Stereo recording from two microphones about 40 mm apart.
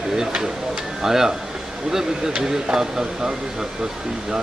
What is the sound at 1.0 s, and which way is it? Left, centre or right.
A man's voice, centre.